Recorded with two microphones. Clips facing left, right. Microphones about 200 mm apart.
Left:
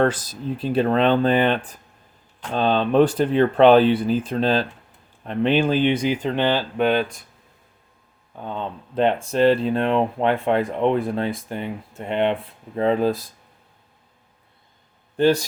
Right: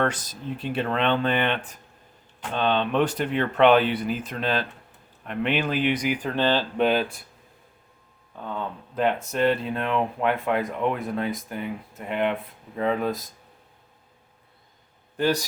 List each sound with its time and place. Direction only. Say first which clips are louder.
0.0 s speech: left 5 dB; 30° left (ahead or behind); by 6.7 s 15° left (ahead or behind)
6.7 s speech: left 2 dB; centre (ahead or behind)
8.4 s speech: left 2 dB; 20° left (ahead or behind)
15.2 s speech: left 6 dB; 25° left (ahead or behind)